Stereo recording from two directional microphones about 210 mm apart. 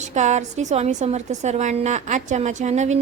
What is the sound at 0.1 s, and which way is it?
A woman's voice, 35° right (ahead or behind).